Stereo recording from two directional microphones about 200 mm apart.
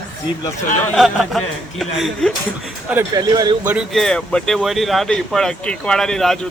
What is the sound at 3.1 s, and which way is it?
Speech, 20° right (ahead or behind).